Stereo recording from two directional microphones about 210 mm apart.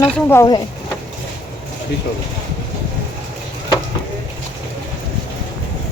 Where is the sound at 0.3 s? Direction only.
15° left (ahead or behind).